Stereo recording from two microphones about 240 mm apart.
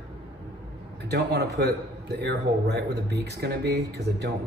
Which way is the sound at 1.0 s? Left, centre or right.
Right.